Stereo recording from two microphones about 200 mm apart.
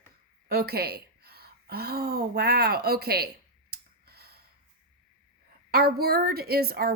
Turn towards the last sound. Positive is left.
turn(degrees=-50)  # may be behind; listen again after turning